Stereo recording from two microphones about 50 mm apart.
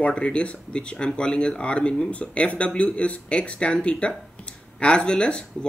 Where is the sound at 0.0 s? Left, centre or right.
Left.